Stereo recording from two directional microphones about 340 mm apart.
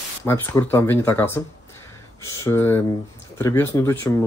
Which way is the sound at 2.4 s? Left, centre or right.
Centre.